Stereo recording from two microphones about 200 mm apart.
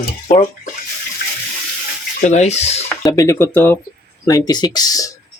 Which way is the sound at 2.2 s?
35° left (ahead or behind).